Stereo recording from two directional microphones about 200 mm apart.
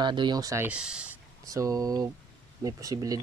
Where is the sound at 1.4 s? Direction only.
15° right (ahead or behind).